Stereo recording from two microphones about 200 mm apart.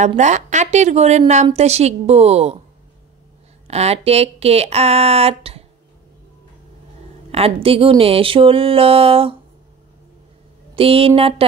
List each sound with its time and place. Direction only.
0.0 s a woman's voice: 35° right (ahead or behind)
3.6 s a woman's voice: 30° right (ahead or behind)
7.2 s speech: 30° right (ahead or behind)
10.8 s speech: 30° right (ahead or behind)